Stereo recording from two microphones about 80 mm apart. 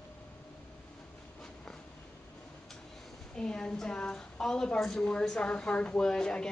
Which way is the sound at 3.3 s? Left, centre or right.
Centre.